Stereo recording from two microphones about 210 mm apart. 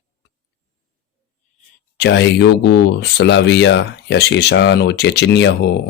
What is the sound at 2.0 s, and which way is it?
Speech, 55° left (ahead or behind).